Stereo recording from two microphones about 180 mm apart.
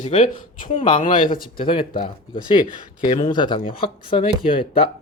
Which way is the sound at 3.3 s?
25° left (ahead or behind).